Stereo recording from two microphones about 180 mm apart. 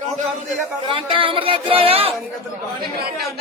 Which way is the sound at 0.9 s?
30° right (ahead or behind).